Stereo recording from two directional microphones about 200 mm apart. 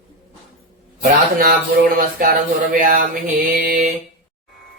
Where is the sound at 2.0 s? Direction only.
45° right (ahead or behind).